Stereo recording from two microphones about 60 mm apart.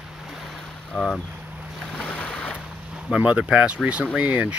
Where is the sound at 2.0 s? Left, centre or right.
Centre.